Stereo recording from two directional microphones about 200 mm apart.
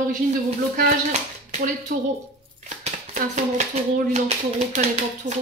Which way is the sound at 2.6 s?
35° right (ahead or behind).